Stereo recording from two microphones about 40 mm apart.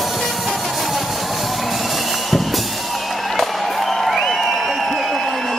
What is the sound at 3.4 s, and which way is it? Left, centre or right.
Music, centre.